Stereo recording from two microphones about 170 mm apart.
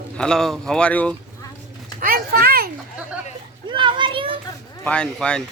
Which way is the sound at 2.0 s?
65° right (ahead or behind).